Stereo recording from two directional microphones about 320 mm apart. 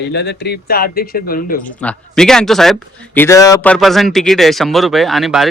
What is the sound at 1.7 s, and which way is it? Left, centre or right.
A man's voice, centre.